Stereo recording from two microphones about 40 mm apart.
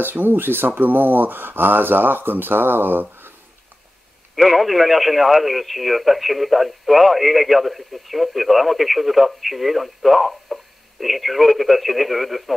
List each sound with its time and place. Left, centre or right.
0.0 s speech: right
4.4 s speech: centre